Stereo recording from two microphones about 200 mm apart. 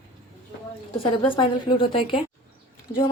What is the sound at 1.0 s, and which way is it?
A woman's voice, 25° left (ahead or behind).